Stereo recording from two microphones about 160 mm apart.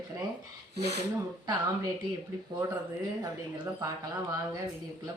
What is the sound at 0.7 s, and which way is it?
Speech, 90° right.